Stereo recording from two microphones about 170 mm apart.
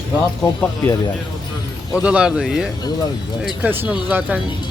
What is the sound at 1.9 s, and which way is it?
Speech, 5° right (ahead or behind).